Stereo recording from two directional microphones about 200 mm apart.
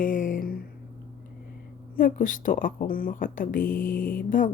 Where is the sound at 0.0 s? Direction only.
40° left (ahead or behind).